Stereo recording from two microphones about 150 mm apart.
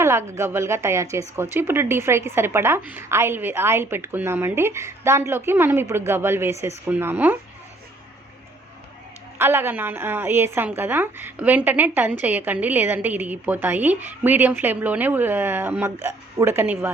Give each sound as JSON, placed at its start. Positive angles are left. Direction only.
{"t": 0.0, "sound": "a woman's voice", "side_deg": -20}
{"t": 9.4, "sound": "a woman's voice", "side_deg": -15}